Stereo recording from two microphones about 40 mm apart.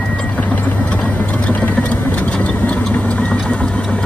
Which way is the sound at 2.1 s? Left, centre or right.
Left.